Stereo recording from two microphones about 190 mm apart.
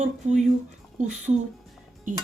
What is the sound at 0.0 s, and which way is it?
Speech, 40° right (ahead or behind).